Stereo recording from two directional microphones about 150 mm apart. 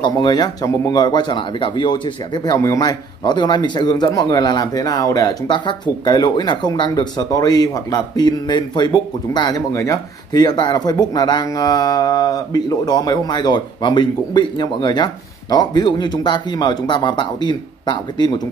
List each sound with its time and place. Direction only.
0.0 s speech: 30° left (ahead or behind)